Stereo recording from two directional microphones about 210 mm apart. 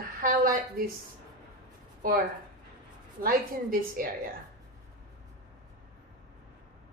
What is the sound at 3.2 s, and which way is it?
Speech, 40° right (ahead or behind).